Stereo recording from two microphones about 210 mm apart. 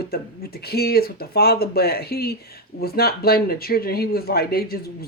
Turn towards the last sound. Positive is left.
turn(degrees=50)  # may be behind; listen again after turning